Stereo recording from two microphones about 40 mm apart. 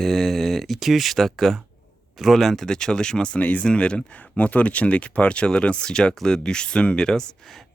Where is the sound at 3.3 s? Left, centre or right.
Left.